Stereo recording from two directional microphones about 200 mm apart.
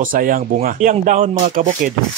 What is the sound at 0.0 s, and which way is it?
Speech, 45° right (ahead or behind).